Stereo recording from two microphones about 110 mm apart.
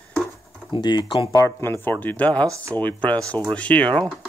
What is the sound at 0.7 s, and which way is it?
Speech, 45° left (ahead or behind).